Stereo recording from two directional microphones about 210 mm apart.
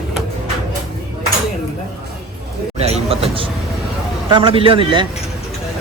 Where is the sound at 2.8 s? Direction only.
30° right (ahead or behind).